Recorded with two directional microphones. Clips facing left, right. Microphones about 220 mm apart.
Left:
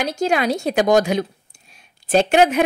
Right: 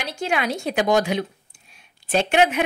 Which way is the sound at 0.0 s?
40° left (ahead or behind).